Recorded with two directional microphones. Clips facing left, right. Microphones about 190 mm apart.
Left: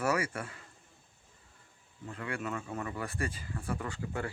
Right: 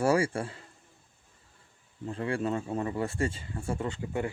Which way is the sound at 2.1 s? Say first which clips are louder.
Right 7 dB; 30° right (ahead or behind).